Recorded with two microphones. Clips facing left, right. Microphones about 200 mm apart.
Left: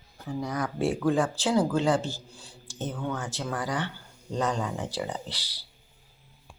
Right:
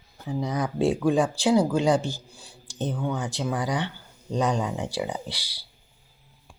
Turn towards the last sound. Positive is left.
turn(degrees=-10)  # may be behind; listen again after turning